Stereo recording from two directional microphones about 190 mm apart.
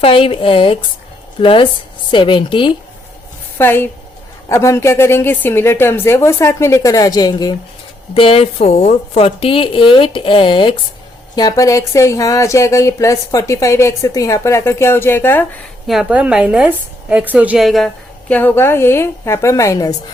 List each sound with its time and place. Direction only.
0.0 s a woman's voice: 30° left (ahead or behind)
3.6 s a woman's voice: 10° left (ahead or behind)
15.9 s a woman's voice: 5° right (ahead or behind); by 20.0 s 20° left (ahead or behind)